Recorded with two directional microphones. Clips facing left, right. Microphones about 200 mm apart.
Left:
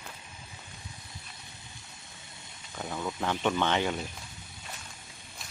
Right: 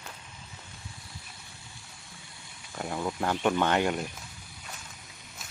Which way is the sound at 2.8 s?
10° right (ahead or behind).